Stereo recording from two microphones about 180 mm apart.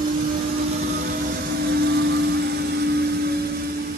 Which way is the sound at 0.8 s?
60° right (ahead or behind).